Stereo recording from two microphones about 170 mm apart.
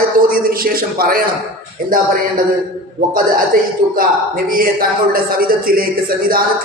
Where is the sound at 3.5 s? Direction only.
55° right (ahead or behind).